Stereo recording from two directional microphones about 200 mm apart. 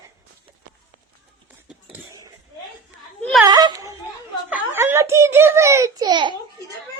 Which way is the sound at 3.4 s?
20° right (ahead or behind).